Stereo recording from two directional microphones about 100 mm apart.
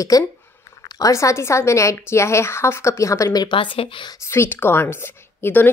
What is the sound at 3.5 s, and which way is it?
Speech, 65° left (ahead or behind).